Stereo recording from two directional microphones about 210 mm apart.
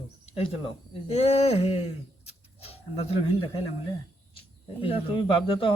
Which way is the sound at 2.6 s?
30° left (ahead or behind).